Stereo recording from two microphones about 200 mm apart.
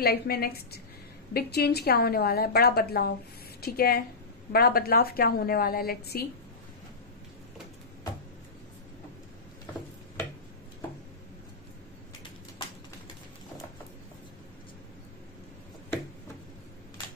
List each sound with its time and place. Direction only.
0.0 s a woman's voice: 50° left (ahead or behind)